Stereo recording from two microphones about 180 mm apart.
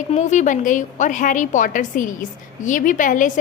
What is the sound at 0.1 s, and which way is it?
A woman's voice, 40° left (ahead or behind).